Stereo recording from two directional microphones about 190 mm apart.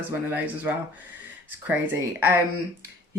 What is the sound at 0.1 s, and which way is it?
Speech, 10° right (ahead or behind).